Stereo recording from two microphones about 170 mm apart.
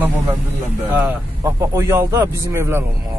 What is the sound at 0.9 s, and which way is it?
Speech, 15° right (ahead or behind).